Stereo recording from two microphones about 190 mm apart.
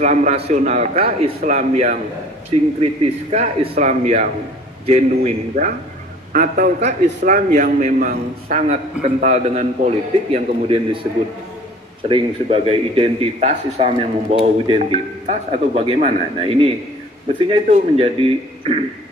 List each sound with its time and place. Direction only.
0.0 s a man's voice: 40° right (ahead or behind)
12.1 s a man's voice: 30° right (ahead or behind)